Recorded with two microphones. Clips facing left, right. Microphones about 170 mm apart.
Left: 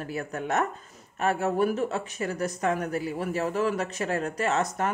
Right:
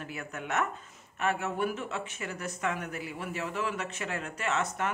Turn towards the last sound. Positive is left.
turn(degrees=40)  # may be behind; listen again after turning